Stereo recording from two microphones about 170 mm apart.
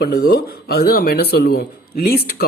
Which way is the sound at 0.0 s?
65° left (ahead or behind).